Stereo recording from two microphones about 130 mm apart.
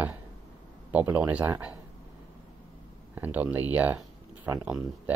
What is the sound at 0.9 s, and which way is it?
Speech, 15° right (ahead or behind).